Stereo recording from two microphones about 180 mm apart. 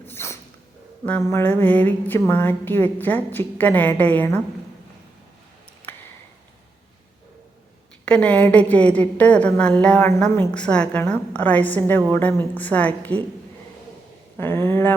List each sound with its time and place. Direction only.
0.0 s a sound: 15° left (ahead or behind)
1.0 s a woman's voice: 10° left (ahead or behind)
8.0 s a woman's voice: 5° left (ahead or behind)
14.3 s a woman's voice: 15° left (ahead or behind)